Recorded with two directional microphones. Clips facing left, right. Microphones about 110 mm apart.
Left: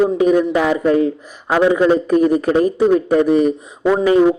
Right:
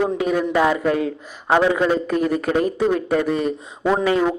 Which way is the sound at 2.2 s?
25° left (ahead or behind).